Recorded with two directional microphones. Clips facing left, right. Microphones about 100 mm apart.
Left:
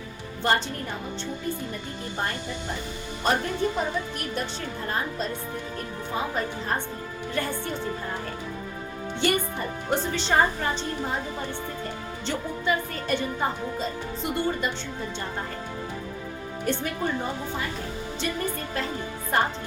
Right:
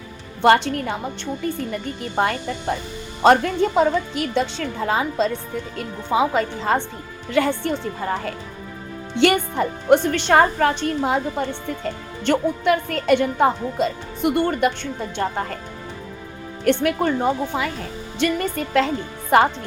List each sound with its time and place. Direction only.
0.4 s a woman's voice: 75° right (ahead or behind)
3.2 s a woman's voice: 90° right; by 14.7 s 60° right (ahead or behind)
15.1 s a woman's voice: 75° right (ahead or behind)
16.6 s a woman's voice: 75° right (ahead or behind)